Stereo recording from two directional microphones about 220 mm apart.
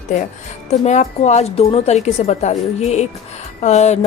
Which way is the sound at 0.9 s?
30° left (ahead or behind).